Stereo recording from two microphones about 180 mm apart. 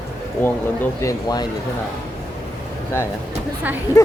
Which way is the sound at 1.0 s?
20° left (ahead or behind).